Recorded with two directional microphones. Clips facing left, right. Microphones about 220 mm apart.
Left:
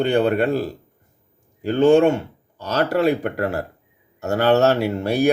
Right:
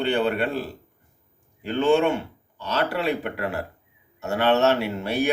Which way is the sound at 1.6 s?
45° left (ahead or behind).